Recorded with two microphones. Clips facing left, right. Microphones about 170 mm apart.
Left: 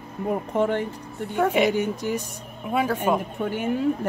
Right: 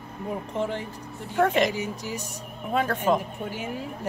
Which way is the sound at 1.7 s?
55° left (ahead or behind).